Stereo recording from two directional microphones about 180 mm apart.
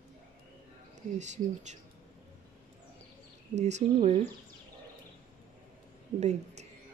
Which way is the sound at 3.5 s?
40° right (ahead or behind).